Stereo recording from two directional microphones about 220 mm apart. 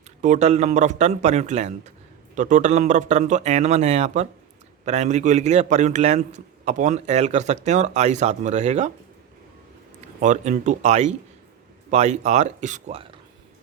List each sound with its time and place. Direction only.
0.2 s a man's voice: 35° right (ahead or behind)
10.2 s a man's voice: 35° right (ahead or behind)